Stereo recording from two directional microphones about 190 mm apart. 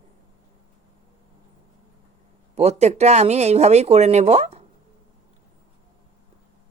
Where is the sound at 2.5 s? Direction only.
35° right (ahead or behind).